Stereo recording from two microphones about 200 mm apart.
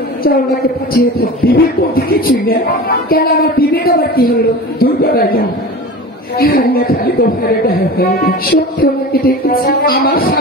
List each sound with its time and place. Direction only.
0.9 s a man's voice: 50° left (ahead or behind)